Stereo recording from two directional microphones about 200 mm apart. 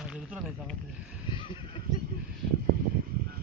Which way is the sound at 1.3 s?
25° left (ahead or behind).